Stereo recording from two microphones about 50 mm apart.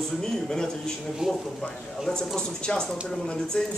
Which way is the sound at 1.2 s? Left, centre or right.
Centre.